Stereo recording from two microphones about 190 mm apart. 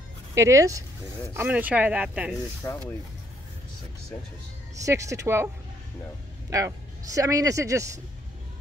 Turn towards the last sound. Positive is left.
turn(degrees=-15)  # may be behind; listen again after turning